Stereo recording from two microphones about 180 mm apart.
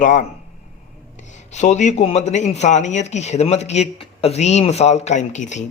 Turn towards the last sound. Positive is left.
turn(degrees=40)  # may be behind; listen again after turning